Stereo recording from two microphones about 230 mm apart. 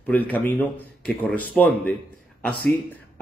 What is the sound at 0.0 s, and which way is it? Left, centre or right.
A man's voice, centre.